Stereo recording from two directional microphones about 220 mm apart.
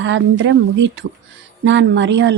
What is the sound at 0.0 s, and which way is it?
A woman's voice, 55° right (ahead or behind).